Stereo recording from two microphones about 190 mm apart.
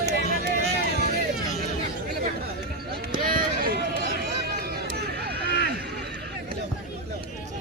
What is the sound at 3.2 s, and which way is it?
Run, 45° right (ahead or behind).